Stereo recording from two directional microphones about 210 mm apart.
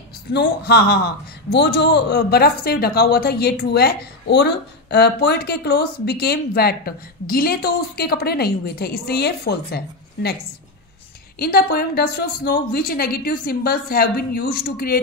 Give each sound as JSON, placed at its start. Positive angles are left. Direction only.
{"t": 0.3, "sound": "a man's voice", "side_deg": 50}
{"t": 11.3, "sound": "a man's voice", "side_deg": 45}